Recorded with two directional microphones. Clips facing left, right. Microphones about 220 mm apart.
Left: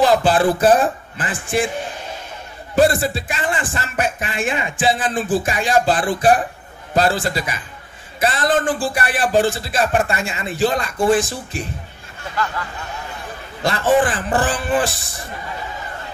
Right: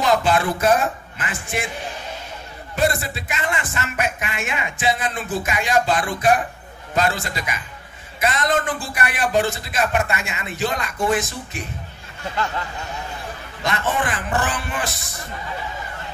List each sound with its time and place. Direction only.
0.0 s speech: 35° left (ahead or behind)
2.7 s speech: 30° left (ahead or behind)
13.7 s speech: 30° left (ahead or behind)